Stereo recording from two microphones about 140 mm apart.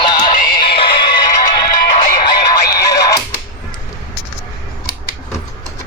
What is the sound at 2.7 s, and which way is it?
Music, 25° left (ahead or behind).